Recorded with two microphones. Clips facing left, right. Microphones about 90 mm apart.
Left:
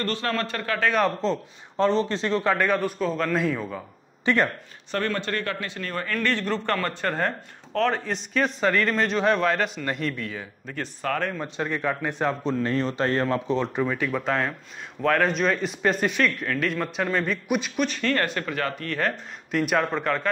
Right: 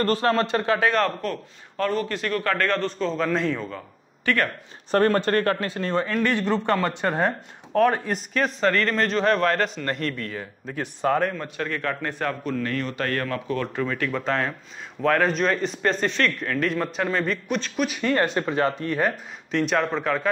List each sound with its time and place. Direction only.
0.0 s a man's voice: 35° right (ahead or behind)
1.2 s a man's voice: 25° left (ahead or behind)
2.5 s a man's voice: 10° left (ahead or behind)
4.2 s speech: 20° left (ahead or behind)
4.9 s a man's voice: 40° right (ahead or behind); by 10.4 s 5° left (ahead or behind)
11.0 s speech: 20° right (ahead or behind)
11.4 s a man's voice: 20° left (ahead or behind)
13.8 s speech: 10° left (ahead or behind)
17.5 s a man's voice: 10° left (ahead or behind)
17.7 s a man's voice: 10° right (ahead or behind)
19.5 s speech: 5° left (ahead or behind)